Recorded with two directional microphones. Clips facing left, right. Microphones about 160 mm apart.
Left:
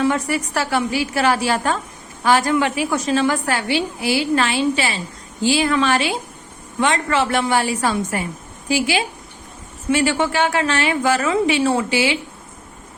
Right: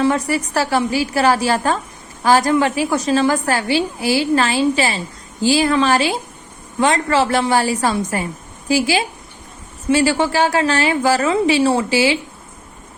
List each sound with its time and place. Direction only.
0.0 s a woman's voice: 35° right (ahead or behind)